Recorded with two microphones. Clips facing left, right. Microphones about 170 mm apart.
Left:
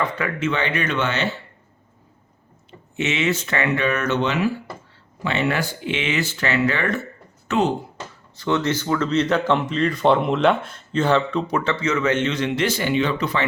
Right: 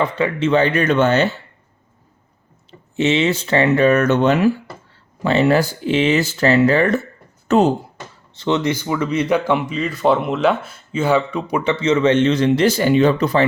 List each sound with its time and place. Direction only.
0.0 s speech: 30° right (ahead or behind)
2.9 s speech: 30° right (ahead or behind)
7.4 s a sound: 40° right (ahead or behind)
8.4 s speech: 20° right (ahead or behind); by 13.4 s 40° right (ahead or behind)